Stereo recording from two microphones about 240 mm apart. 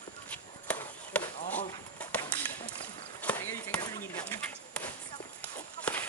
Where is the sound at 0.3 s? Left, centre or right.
Centre.